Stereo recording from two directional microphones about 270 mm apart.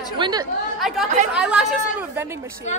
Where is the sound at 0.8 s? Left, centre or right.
Centre.